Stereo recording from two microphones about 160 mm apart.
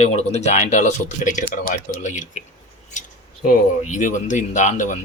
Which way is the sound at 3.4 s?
55° left (ahead or behind).